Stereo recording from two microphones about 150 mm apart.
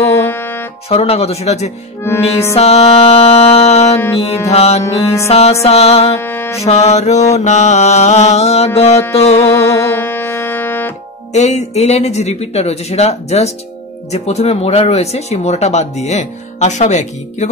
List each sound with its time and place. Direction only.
0.0 s music: 15° left (ahead or behind)
0.8 s speech: 40° left (ahead or behind)
2.5 s music: 45° left (ahead or behind)
4.5 s speech: 45° left (ahead or behind)
4.8 s music: 20° left (ahead or behind)
5.3 s speech: 45° left (ahead or behind)
6.1 s music: 15° left (ahead or behind)
6.6 s speech: 45° left (ahead or behind)
9.4 s music: 15° left (ahead or behind)
11.3 s speech: 50° left (ahead or behind)